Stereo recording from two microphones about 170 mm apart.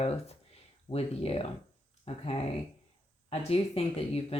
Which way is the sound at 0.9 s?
35° left (ahead or behind).